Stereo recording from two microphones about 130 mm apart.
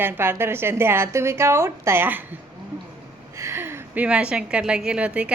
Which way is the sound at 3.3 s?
20° right (ahead or behind).